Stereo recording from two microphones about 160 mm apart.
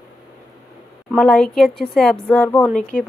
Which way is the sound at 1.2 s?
5° left (ahead or behind).